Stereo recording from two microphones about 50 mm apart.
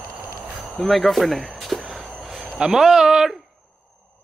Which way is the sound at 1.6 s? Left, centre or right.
Centre.